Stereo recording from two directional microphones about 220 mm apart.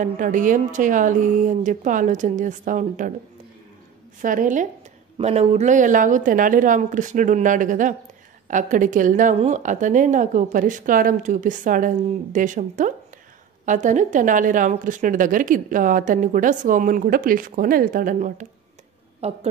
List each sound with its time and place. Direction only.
0.0 s a woman's voice: 35° right (ahead or behind)
4.2 s a woman's voice: 35° right (ahead or behind)
19.2 s a woman's voice: 25° right (ahead or behind)